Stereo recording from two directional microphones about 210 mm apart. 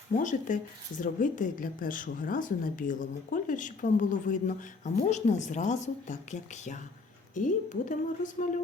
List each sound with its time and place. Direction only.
0.2 s speech: 35° left (ahead or behind)